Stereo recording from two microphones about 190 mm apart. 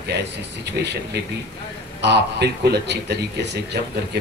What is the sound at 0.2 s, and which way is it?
A man's voice, 65° right (ahead or behind).